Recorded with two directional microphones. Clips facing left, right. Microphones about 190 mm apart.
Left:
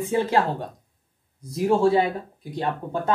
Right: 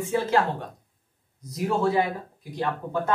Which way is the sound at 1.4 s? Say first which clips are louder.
Left 5 dB; 30° left (ahead or behind).